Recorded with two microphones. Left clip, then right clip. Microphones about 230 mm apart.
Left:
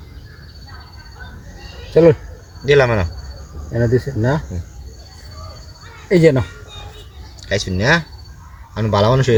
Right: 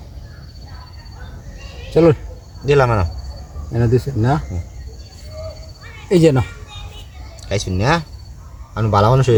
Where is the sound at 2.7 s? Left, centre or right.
Right.